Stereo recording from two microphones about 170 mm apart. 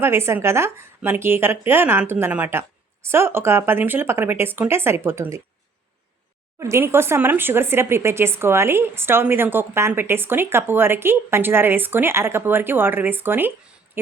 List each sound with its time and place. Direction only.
0.0 s speech: 15° right (ahead or behind)
6.6 s speech: 15° right (ahead or behind)